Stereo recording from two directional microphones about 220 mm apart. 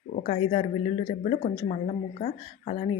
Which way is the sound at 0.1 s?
35° left (ahead or behind).